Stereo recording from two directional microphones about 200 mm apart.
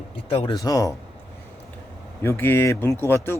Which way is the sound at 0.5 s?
15° left (ahead or behind).